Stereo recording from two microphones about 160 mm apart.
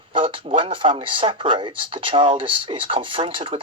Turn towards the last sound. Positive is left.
turn(degrees=-35)  # may be behind; listen again after turning